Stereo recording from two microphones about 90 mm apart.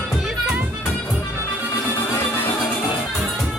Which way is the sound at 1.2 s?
30° left (ahead or behind).